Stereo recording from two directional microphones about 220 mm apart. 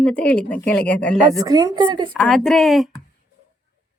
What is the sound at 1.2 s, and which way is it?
Speech, 15° right (ahead or behind).